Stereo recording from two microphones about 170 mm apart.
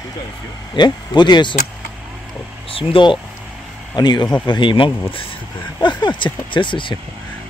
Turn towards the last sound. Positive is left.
turn(degrees=30)  # may be behind; listen again after turning